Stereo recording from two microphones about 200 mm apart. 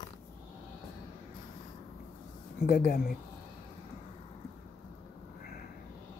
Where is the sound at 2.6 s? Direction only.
50° left (ahead or behind).